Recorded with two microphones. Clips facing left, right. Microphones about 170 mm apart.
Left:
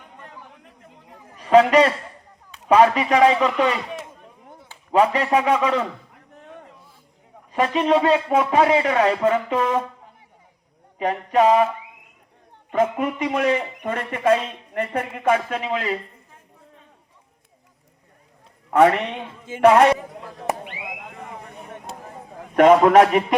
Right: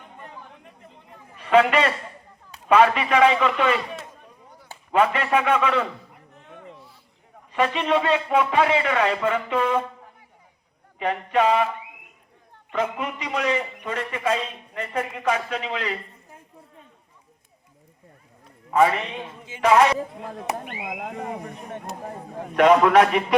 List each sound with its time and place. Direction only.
0.2 s chatter: centre (ahead or behind)
1.4 s a sound: 40° left (ahead or behind)
2.6 s speech: 40° left (ahead or behind)
3.6 s speech: 15° left (ahead or behind)
4.9 s speech: 35° left (ahead or behind)
7.5 s speech: 40° left (ahead or behind)
10.9 s speech: 35° left (ahead or behind)
12.7 s a man's voice: 50° left (ahead or behind)
18.7 s a man's voice: 70° left (ahead or behind)
22.5 s a man's voice: 45° left (ahead or behind)